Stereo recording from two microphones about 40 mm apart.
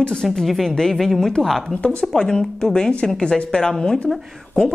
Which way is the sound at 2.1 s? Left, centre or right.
Centre.